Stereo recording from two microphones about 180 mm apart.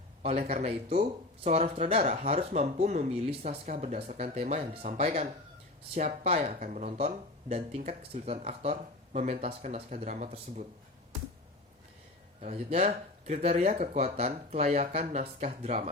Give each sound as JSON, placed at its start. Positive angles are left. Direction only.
{"t": 0.2, "sound": "speech", "side_deg": -35}
{"t": 12.4, "sound": "speech", "side_deg": -40}